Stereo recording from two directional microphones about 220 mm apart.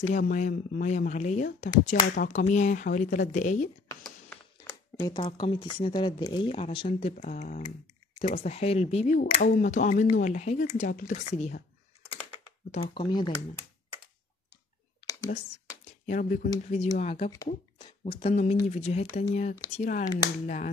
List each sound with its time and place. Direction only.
0.0 s speech: 35° left (ahead or behind)
3.9 s a sound: 5° left (ahead or behind)
5.2 s speech: 25° left (ahead or behind)
12.7 s speech: 25° left (ahead or behind)
15.0 s computer keyboard: 15° left (ahead or behind)
16.1 s speech: 35° left (ahead or behind)